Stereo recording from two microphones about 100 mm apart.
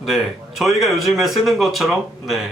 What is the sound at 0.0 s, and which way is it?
A man's voice, centre (ahead or behind).